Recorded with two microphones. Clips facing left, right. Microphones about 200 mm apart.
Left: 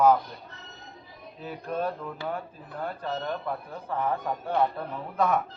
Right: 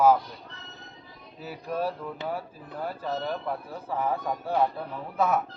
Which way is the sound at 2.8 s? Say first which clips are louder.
Right 1 dB; 5° right (ahead or behind).